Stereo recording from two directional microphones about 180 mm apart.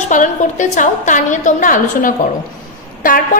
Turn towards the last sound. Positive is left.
turn(degrees=50)  # may be behind; listen again after turning